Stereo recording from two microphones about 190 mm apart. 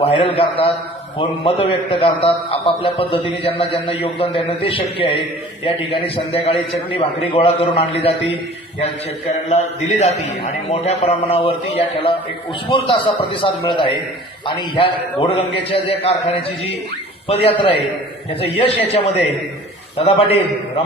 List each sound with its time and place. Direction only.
0.0 s a man's voice: 25° left (ahead or behind)
9.5 s a man's voice: 35° left (ahead or behind)